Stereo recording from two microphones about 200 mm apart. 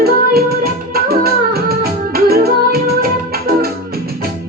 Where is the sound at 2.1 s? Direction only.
50° right (ahead or behind).